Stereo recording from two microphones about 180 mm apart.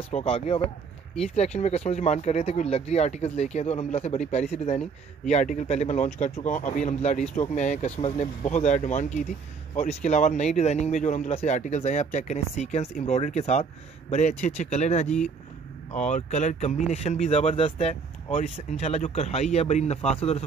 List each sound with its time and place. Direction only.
0.1 s speech: 35° left (ahead or behind)